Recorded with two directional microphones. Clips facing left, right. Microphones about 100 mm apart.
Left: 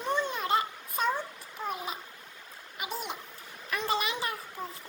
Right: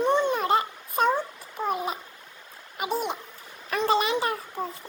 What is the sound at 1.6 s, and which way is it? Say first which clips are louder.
A child's voice: right 7 dB; 45° right (ahead or behind).